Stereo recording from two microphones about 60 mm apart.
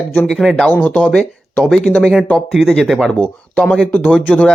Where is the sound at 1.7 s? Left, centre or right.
Centre.